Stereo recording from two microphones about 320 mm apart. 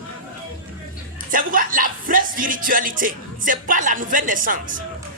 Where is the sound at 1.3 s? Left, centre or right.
Right.